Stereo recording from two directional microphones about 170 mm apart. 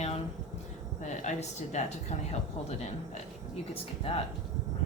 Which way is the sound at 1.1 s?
45° left (ahead or behind).